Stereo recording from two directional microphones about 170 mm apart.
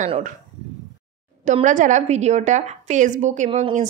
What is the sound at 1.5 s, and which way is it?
A woman's voice, 45° right (ahead or behind).